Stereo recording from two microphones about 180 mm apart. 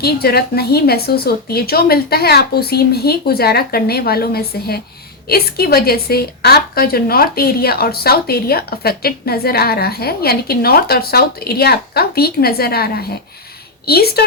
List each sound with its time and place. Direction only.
0.0 s a woman's voice: 60° left (ahead or behind)